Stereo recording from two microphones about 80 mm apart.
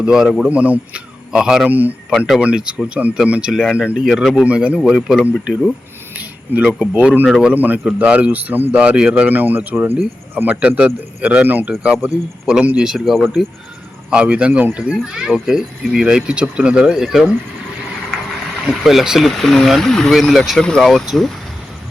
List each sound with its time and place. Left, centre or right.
0.0 s speech: centre
0.5 s a man's voice: centre
1.7 s speech: right
2.0 s speech: centre
2.4 s speech: centre
4.0 s speech: centre
4.4 s speech: centre
4.8 s speech: centre
6.6 s speech: centre
13.1 s speech: centre
14.1 s speech: centre
18.6 s speech: centre